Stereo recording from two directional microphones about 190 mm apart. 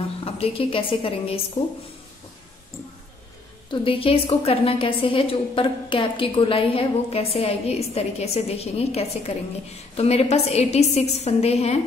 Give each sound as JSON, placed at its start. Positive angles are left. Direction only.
{"t": 0.2, "sound": "a woman's voice", "side_deg": 30}
{"t": 3.7, "sound": "a woman's voice", "side_deg": 30}